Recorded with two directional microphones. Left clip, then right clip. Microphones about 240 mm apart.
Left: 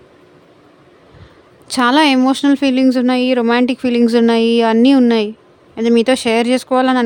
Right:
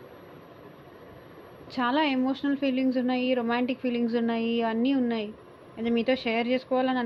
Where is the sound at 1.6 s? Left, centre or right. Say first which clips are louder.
Left 14 dB; left.